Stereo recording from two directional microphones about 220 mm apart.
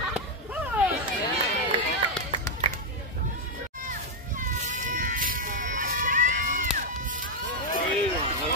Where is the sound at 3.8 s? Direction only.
35° right (ahead or behind).